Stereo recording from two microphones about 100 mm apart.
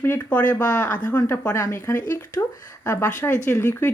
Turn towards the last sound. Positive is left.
turn(degrees=25)  # may be behind; listen again after turning